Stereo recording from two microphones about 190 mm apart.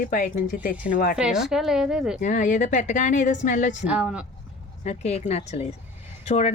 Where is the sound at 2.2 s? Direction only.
40° left (ahead or behind).